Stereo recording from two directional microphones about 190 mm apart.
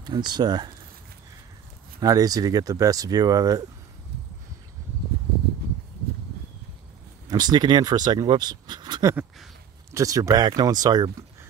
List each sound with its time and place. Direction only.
0.0 s speech: 20° right (ahead or behind)
2.0 s speech: 20° right (ahead or behind)
7.2 s speech: 20° right (ahead or behind)